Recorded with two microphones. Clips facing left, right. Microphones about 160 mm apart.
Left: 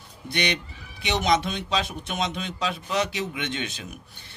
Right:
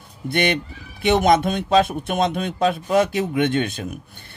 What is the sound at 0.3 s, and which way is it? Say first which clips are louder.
Speech: right 7 dB; 50° right (ahead or behind).